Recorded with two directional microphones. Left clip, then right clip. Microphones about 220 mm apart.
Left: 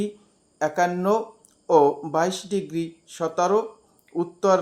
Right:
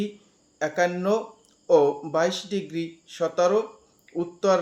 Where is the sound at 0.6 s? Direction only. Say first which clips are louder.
Left 2 dB; 45° left (ahead or behind).